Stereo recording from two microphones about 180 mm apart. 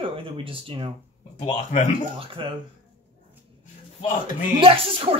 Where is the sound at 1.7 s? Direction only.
40° left (ahead or behind).